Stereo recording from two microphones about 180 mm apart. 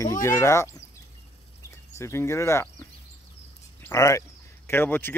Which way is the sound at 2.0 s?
15° left (ahead or behind).